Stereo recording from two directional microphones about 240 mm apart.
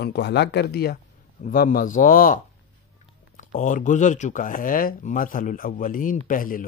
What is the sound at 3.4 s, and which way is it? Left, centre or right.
Speech, left.